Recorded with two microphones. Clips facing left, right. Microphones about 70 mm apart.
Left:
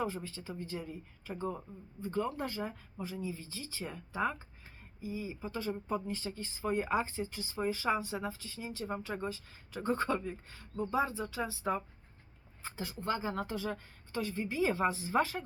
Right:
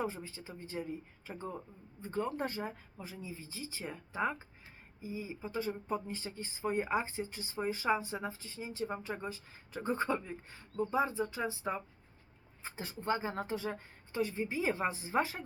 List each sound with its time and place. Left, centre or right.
0.0 s speech: centre
1.3 s speech: centre
2.0 s speech: right
4.9 s speech: right
8.9 s speech: centre
12.6 s speech: right